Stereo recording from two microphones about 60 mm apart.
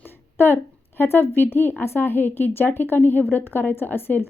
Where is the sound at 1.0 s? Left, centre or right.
Left.